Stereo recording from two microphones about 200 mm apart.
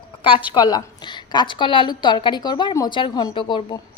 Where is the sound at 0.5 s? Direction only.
20° left (ahead or behind).